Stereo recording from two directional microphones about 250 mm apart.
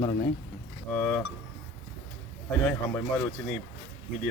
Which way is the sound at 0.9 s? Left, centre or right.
Centre.